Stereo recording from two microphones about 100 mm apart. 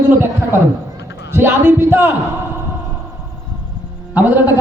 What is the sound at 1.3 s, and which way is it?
Speech, 25° right (ahead or behind).